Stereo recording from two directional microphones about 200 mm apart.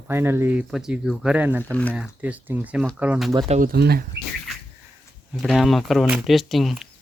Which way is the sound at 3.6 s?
50° right (ahead or behind).